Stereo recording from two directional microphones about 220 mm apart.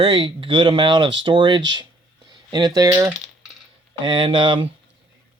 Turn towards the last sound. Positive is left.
turn(degrees=-20)  # may be behind; listen again after turning